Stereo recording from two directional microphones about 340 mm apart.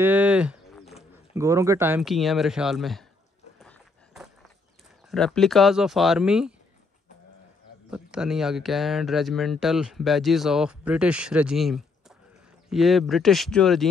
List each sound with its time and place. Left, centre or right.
0.0 s a sound: centre
1.3 s speech: centre
3.5 s dog: centre
5.1 s speech: centre
7.9 s speech: centre